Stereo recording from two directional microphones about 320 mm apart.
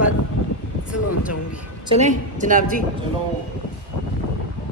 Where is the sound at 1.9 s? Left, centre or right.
Right.